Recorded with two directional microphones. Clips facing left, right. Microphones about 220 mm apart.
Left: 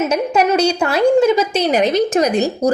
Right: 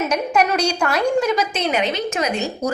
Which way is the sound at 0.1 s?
25° left (ahead or behind).